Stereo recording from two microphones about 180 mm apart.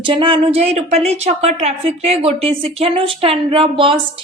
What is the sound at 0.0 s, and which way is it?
A woman's voice, 30° right (ahead or behind).